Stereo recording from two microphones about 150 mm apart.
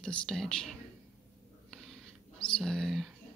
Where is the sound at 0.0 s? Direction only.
5° left (ahead or behind).